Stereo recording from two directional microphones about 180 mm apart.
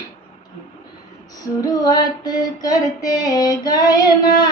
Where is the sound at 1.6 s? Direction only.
20° left (ahead or behind).